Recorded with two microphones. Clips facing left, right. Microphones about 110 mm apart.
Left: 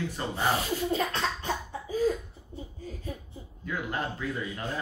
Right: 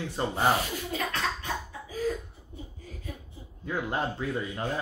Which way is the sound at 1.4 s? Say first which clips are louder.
Left 2 dB; 30° left (ahead or behind).